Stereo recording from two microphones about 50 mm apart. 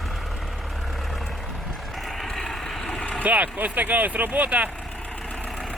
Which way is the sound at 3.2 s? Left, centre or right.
Right.